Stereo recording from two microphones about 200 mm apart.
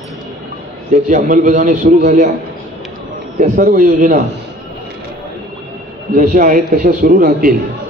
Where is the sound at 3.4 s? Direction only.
40° right (ahead or behind).